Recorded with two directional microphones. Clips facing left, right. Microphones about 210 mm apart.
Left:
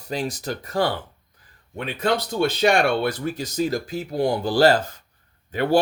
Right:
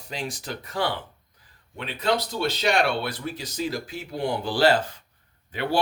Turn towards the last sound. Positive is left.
turn(degrees=45)  # may be behind; listen again after turning